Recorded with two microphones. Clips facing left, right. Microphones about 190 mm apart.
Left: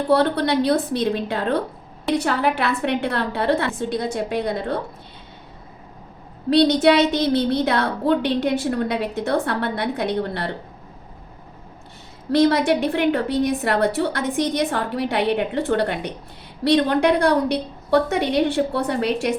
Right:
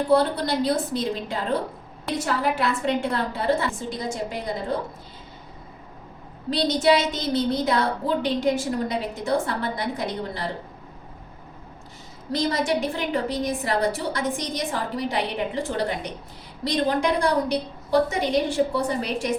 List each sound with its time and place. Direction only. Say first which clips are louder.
0.1 s a woman's voice: left 3 dB; 65° left (ahead or behind)
6.5 s a woman's voice: left 5 dB; 65° left (ahead or behind)
12.3 s a woman's voice: left 7 dB; 65° left (ahead or behind)